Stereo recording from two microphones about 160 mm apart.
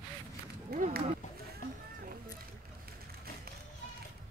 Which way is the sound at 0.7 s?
75° right (ahead or behind).